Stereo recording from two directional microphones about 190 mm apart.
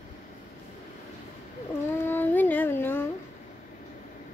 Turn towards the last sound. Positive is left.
turn(degrees=10)  # may be behind; listen again after turning